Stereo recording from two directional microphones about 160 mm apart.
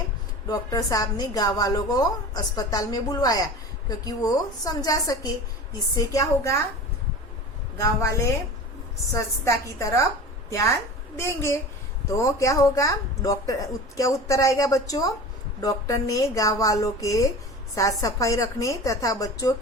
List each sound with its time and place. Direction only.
0.4 s a woman's voice: 20° left (ahead or behind)
7.8 s a woman's voice: 20° left (ahead or behind)
12.1 s a woman's voice: 20° left (ahead or behind)